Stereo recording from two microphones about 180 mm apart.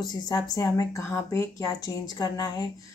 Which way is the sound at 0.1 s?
20° left (ahead or behind).